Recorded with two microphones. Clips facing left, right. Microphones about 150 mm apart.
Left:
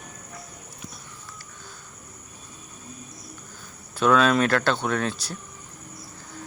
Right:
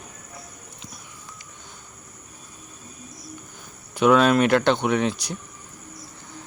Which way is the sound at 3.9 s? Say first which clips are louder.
Right 3 dB; 15° right (ahead or behind).